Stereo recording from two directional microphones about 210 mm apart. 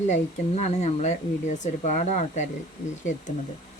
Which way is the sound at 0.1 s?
30° left (ahead or behind).